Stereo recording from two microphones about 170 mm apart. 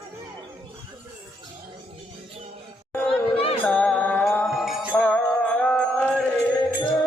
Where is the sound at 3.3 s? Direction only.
35° left (ahead or behind).